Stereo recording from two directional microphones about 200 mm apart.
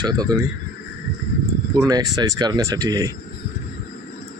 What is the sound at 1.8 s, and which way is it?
Speech, 20° right (ahead or behind).